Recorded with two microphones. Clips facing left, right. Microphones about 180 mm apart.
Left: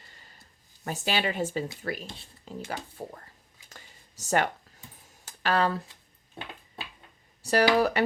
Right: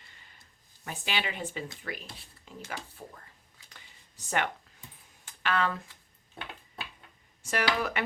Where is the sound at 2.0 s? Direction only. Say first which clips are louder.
Left 6 dB; 30° left (ahead or behind).